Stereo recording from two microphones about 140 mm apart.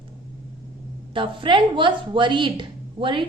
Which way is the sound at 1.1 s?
35° right (ahead or behind).